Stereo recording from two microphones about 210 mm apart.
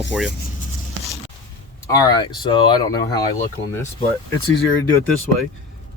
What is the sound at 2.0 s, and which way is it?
Speech, 20° left (ahead or behind).